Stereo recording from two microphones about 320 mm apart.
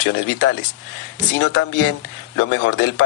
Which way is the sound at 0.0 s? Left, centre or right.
Left.